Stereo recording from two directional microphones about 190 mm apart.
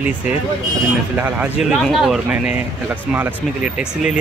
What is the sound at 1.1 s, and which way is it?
Speech, 10° right (ahead or behind).